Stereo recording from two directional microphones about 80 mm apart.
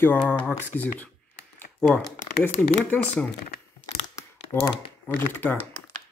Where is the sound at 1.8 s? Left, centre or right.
Centre.